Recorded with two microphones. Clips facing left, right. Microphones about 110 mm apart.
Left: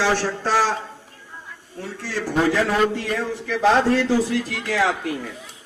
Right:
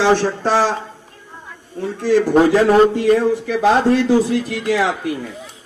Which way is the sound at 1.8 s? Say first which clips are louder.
Right 13 dB; 20° right (ahead or behind).